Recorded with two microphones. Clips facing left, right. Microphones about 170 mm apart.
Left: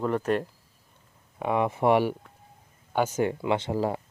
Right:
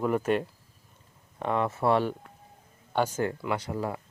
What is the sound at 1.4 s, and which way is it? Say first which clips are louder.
Speech: left 2 dB; 15° left (ahead or behind).